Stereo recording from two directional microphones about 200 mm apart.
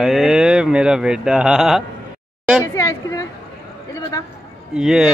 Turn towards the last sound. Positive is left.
turn(degrees=-5)  # may be behind; listen again after turning